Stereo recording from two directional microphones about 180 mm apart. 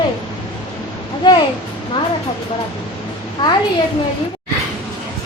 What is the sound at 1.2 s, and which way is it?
Speech, 25° left (ahead or behind).